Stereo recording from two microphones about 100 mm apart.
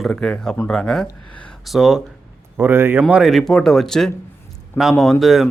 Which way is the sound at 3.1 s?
5° right (ahead or behind).